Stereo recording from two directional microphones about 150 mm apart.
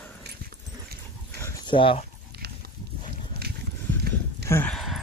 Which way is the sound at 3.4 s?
90° right.